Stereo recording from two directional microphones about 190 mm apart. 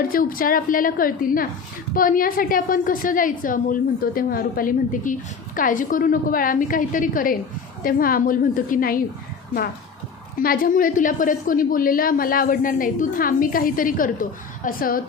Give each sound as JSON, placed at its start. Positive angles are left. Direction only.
{"t": 0.1, "sound": "a woman's voice", "side_deg": 50}
{"t": 10.4, "sound": "a woman's voice", "side_deg": 50}